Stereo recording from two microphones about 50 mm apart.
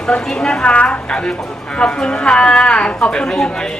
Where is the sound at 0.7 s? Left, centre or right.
Left.